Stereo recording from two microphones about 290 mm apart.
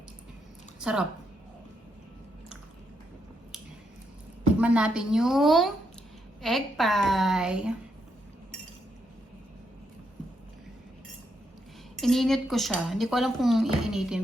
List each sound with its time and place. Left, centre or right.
0.8 s a woman's voice: centre
4.6 s speech: centre
11.9 s speech: centre